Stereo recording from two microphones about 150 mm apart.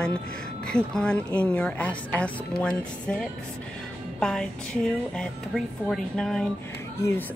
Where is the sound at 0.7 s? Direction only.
5° left (ahead or behind).